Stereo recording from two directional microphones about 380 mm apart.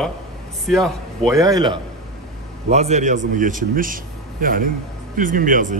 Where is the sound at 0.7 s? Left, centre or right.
Centre.